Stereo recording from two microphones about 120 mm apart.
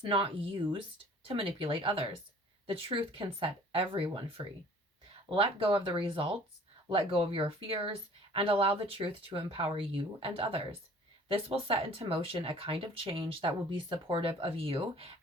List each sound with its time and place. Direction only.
0.0 s speech: 45° right (ahead or behind)